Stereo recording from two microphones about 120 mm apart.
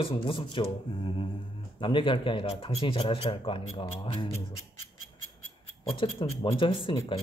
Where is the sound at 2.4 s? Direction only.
60° left (ahead or behind).